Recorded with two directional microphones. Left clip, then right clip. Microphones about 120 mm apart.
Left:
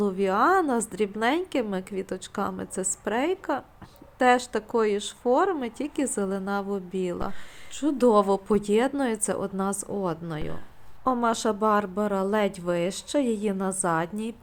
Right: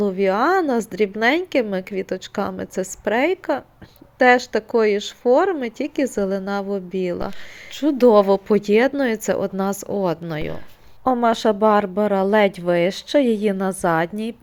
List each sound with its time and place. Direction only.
0.0 s a woman's voice: 10° right (ahead or behind)
7.7 s a woman's voice: 25° right (ahead or behind)